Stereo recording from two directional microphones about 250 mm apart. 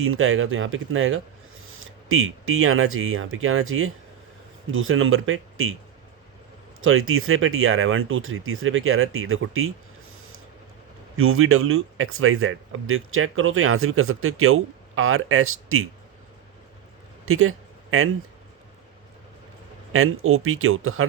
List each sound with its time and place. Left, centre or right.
0.0 s speech: right
6.8 s speech: right
11.2 s speech: right
17.2 s speech: right
19.9 s speech: right